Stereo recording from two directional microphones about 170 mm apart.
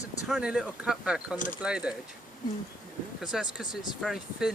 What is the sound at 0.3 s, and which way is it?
Speech, 5° right (ahead or behind).